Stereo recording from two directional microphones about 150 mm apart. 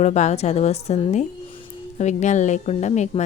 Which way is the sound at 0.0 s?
50° left (ahead or behind).